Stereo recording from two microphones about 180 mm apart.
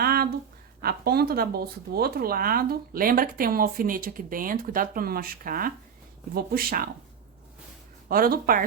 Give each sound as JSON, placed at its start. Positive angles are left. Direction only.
{"t": 0.0, "sound": "a sound", "side_deg": -60}
{"t": 0.8, "sound": "speech", "side_deg": -60}
{"t": 8.0, "sound": "speech", "side_deg": -55}